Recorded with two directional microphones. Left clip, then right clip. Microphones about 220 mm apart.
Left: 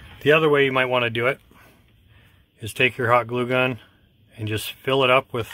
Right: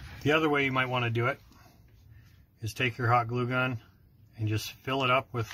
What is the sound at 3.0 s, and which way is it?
Speech, 55° left (ahead or behind).